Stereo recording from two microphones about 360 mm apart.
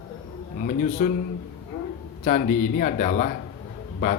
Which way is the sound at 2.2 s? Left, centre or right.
Left.